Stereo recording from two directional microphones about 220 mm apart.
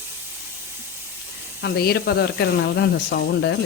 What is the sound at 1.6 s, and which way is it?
Speech, 45° left (ahead or behind).